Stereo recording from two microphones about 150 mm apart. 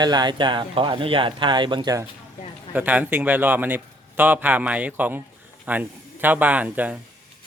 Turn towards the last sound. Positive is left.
turn(degrees=-10)  # may be behind; listen again after turning